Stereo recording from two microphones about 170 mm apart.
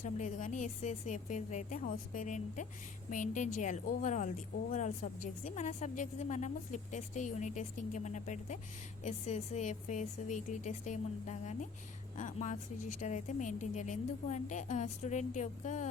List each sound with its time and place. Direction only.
0.0 s a woman's voice: 45° left (ahead or behind)